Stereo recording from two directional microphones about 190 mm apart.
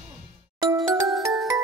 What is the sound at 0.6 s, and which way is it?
Music, 15° right (ahead or behind).